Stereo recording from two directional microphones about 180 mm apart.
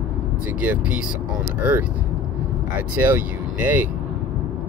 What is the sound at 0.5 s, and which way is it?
Speech, 10° right (ahead or behind).